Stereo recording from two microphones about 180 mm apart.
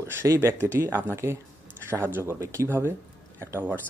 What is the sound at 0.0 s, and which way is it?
Speech, 15° right (ahead or behind).